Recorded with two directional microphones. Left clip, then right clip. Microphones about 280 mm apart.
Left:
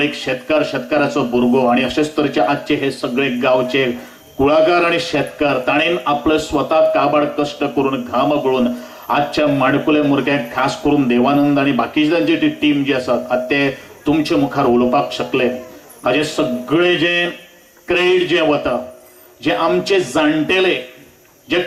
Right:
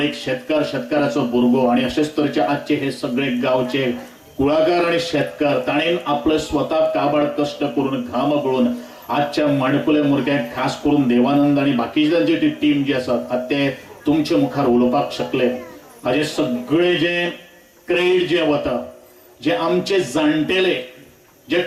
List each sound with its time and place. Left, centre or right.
0.0 s speech: centre
14.7 s speech: right
14.9 s speech: centre